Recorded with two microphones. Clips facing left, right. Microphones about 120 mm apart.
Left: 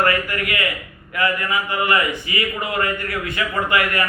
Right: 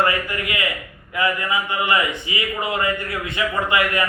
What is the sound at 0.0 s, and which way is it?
A man's voice, 20° right (ahead or behind).